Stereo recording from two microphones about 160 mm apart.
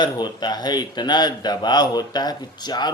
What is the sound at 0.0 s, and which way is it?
A man's voice, 25° left (ahead or behind).